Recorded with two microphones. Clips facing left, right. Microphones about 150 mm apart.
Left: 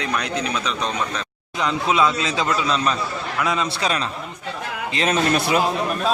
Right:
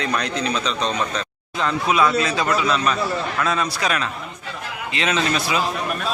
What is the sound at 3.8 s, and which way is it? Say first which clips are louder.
Speech: even; 30° left (ahead or behind).